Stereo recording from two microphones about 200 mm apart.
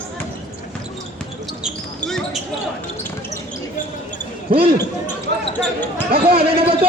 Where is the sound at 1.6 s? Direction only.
Centre (ahead or behind).